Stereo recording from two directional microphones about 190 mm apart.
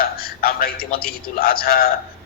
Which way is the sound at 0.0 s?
50° left (ahead or behind).